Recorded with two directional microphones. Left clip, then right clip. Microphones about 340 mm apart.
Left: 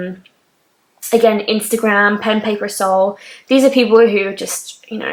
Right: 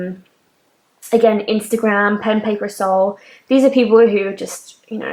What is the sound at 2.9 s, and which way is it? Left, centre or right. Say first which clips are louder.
Speech: left 1 dB; centre.